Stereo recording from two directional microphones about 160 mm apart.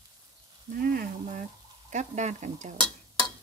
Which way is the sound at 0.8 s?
70° right (ahead or behind).